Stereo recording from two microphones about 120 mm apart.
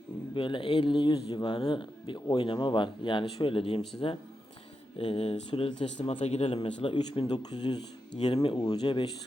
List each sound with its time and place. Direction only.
0.3 s speech: 45° left (ahead or behind)
6.0 s speech: 80° left; by 8.5 s 45° left (ahead or behind)
8.5 s speech: 35° left (ahead or behind)